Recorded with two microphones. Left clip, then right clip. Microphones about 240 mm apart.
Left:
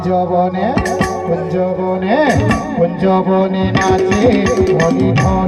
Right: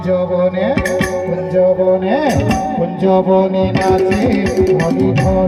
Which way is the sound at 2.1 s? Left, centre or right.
Right.